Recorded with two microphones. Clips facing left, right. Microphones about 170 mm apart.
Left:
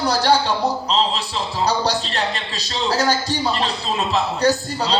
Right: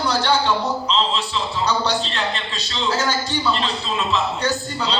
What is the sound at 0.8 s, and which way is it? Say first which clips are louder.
A man's voice: left 1 dB; 40° left (ahead or behind).